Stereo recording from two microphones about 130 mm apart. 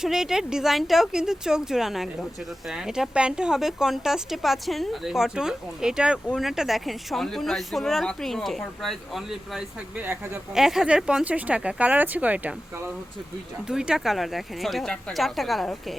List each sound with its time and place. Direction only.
0.0 s speech: 5° right (ahead or behind)
10.0 s speech: 15° right (ahead or behind)
10.5 s speech: 5° right (ahead or behind)
13.7 s speech: 5° right (ahead or behind)